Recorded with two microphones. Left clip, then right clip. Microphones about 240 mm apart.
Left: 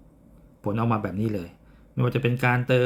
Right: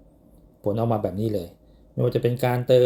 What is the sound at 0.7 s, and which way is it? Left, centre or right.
Speech, centre.